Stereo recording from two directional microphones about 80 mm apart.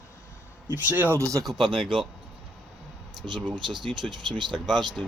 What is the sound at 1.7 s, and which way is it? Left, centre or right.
Speech, right.